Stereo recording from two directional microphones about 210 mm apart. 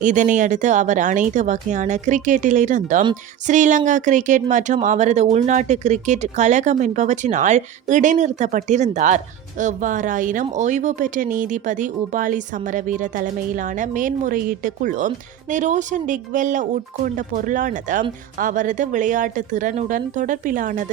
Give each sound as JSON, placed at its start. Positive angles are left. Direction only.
{"t": 0.0, "sound": "speech", "side_deg": -35}